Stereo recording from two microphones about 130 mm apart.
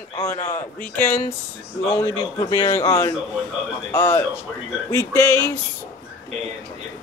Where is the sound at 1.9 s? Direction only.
25° left (ahead or behind).